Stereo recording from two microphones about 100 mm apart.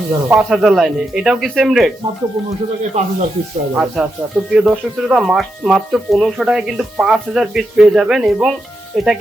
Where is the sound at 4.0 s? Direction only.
Centre (ahead or behind).